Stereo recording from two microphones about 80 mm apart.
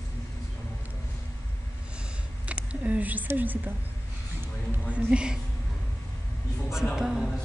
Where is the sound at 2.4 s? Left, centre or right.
Centre.